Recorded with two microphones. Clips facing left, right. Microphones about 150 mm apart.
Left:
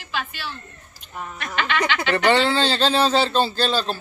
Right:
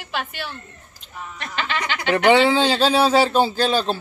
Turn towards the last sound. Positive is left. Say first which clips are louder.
# right 3 dB
turn(degrees=-15)  # may be behind; listen again after turning